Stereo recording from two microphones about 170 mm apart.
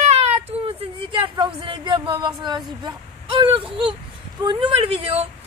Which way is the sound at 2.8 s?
30° right (ahead or behind).